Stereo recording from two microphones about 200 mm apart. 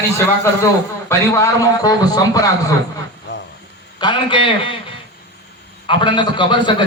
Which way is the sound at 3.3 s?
60° left (ahead or behind).